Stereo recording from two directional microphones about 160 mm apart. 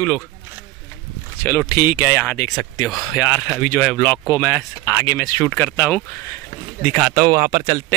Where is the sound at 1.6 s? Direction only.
25° left (ahead or behind).